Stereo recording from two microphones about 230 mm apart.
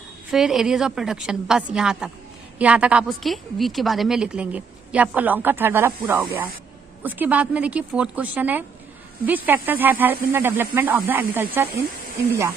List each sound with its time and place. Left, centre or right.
0.3 s a woman's voice: centre